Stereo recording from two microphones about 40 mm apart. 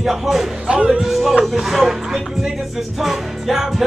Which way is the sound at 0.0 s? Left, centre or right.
Centre.